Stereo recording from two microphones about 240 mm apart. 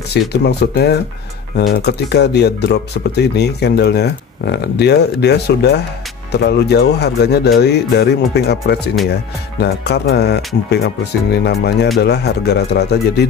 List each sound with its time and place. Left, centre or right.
0.3 s speech: left